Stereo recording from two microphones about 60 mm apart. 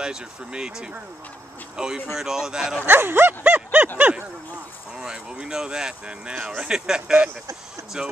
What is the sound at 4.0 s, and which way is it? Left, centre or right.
Speech, right.